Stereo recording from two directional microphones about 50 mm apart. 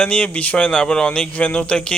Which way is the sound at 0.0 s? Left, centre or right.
Left.